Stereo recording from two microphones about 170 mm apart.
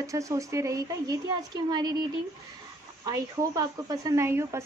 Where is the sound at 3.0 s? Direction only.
20° right (ahead or behind).